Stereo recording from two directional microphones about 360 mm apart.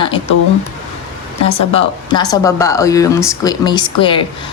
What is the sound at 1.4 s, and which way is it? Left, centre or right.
Speech, centre.